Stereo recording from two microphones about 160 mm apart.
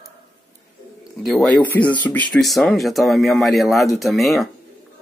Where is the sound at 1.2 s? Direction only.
Centre (ahead or behind).